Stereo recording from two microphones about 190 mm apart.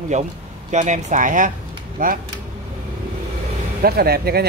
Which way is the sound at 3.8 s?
55° right (ahead or behind).